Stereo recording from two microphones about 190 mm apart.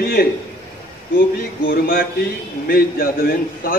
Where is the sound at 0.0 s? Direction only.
50° left (ahead or behind).